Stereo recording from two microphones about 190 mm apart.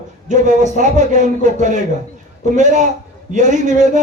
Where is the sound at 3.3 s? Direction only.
40° right (ahead or behind).